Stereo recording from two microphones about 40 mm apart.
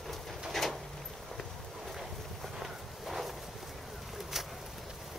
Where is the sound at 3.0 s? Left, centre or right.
Centre.